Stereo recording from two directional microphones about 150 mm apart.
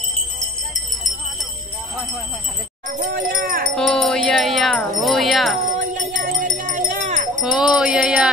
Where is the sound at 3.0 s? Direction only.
85° right.